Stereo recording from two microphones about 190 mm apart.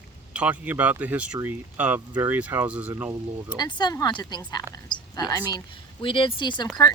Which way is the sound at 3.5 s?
25° left (ahead or behind).